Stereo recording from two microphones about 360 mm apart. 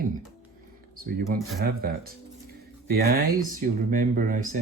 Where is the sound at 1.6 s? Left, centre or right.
Right.